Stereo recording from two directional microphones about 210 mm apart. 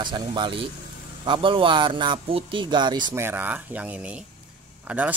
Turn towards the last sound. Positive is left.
turn(degrees=-5)  # may be behind; listen again after turning